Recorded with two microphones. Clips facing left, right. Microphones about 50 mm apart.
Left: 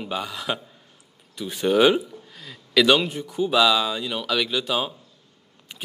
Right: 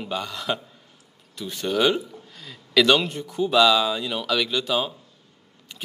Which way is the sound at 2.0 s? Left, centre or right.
Centre.